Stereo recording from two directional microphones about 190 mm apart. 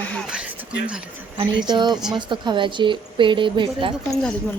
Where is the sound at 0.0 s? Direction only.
5° left (ahead or behind).